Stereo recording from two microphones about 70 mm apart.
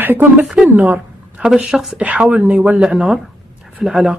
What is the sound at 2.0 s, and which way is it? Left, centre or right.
Speech, centre.